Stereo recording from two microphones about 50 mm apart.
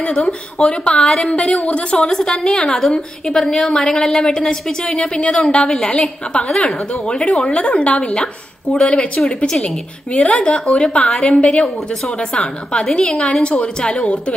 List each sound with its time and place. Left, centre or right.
0.0 s a woman's voice: left